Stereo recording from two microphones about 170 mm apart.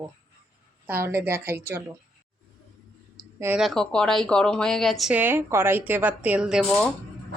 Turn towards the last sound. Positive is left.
turn(degrees=-5)  # may be behind; listen again after turning